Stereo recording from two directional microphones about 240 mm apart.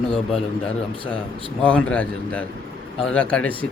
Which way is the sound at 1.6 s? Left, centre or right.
Centre.